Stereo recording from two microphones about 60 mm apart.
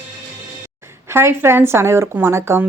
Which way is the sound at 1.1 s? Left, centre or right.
Right.